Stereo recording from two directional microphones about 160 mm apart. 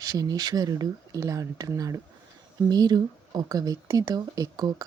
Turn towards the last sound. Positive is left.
turn(degrees=-25)  # may be behind; listen again after turning